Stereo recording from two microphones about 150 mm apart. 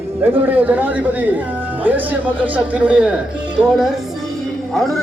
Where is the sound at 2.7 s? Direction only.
5° right (ahead or behind).